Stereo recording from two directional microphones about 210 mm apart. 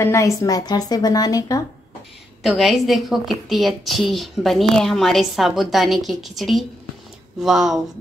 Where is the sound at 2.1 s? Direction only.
Centre (ahead or behind).